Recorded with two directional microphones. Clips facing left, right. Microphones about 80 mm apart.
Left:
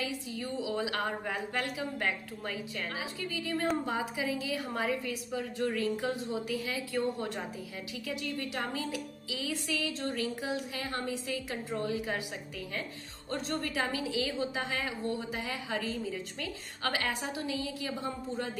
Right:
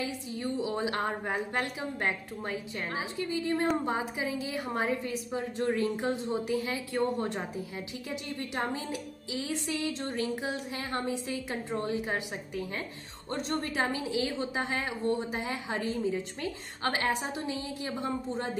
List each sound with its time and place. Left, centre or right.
0.0 s a woman's voice: right
8.4 s a woman's voice: right
13.3 s a woman's voice: right